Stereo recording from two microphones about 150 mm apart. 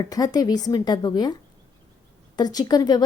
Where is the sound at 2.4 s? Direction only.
25° left (ahead or behind).